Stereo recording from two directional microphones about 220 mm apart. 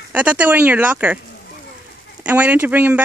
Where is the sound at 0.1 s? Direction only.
5° right (ahead or behind).